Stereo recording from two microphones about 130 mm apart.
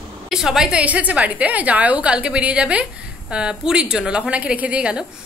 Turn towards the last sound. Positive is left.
turn(degrees=-10)  # may be behind; listen again after turning